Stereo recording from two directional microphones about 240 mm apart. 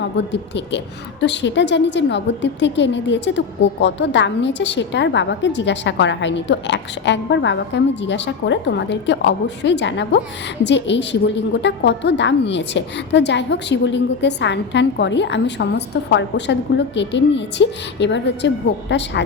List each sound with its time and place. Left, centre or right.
0.0 s a woman's voice: left